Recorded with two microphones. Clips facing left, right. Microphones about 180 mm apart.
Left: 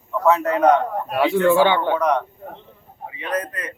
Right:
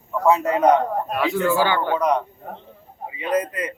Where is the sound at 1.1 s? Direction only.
30° left (ahead or behind).